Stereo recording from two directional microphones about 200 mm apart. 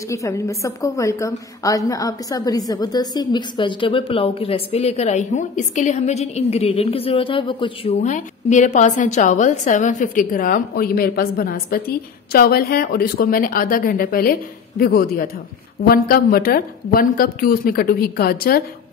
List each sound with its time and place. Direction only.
0.1 s a woman's voice: 15° left (ahead or behind); by 18.6 s 50° left (ahead or behind)